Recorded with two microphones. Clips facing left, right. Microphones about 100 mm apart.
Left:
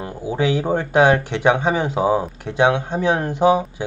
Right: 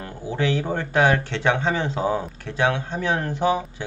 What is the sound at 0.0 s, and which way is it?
Speech, 15° left (ahead or behind).